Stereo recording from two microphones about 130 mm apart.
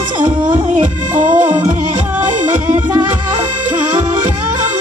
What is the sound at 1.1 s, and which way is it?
Music, 15° right (ahead or behind).